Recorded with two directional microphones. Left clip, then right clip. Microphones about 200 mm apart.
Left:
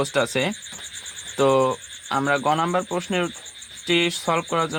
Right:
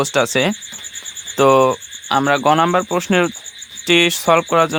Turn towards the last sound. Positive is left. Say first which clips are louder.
# right 9 dB
turn(degrees=-50)  # may be behind; listen again after turning